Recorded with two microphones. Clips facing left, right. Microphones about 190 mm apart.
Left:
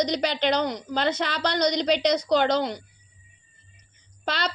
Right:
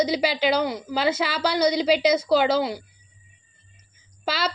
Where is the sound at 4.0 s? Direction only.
5° right (ahead or behind).